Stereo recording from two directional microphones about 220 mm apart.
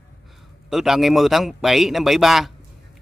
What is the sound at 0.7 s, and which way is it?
Speech, centre (ahead or behind).